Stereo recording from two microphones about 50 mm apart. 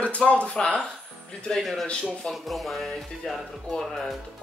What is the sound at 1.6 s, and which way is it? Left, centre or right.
Speech, centre.